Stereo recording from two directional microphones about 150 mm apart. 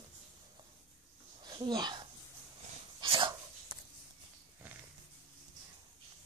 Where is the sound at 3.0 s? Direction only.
30° right (ahead or behind).